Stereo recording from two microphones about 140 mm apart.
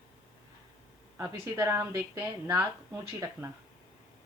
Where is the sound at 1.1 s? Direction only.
20° right (ahead or behind).